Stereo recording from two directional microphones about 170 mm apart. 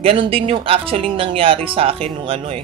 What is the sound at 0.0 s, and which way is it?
Speech, 30° right (ahead or behind).